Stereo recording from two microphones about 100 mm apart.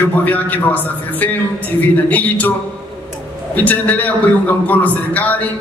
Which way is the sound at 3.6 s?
15° left (ahead or behind).